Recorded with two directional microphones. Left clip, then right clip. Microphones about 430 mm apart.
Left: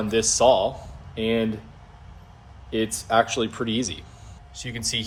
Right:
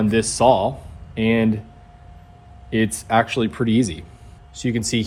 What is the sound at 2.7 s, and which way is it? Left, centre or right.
Speech, centre.